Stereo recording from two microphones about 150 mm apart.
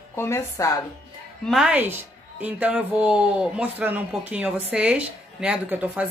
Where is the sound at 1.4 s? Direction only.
5° right (ahead or behind).